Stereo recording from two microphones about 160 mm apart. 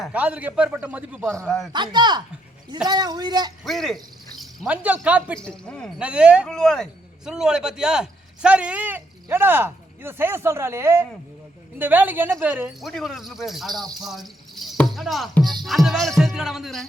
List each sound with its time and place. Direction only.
0.0 s a man's voice: 10° right (ahead or behind)
1.4 s music: centre (ahead or behind)
1.7 s speech: 30° right (ahead or behind)
3.6 s speech: centre (ahead or behind)
5.4 s music: 5° left (ahead or behind)
6.0 s a man's voice: 5° right (ahead or behind)
6.5 s music: 5° left (ahead or behind)
7.3 s a man's voice: 5° right (ahead or behind)
12.8 s music: centre (ahead or behind)
14.0 s speech: centre (ahead or behind)
15.6 s music: centre (ahead or behind)